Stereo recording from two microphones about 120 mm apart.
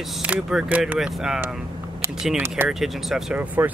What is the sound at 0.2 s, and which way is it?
Speech, 10° right (ahead or behind).